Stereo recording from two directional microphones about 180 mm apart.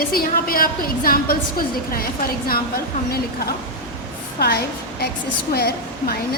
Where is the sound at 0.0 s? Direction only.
55° left (ahead or behind).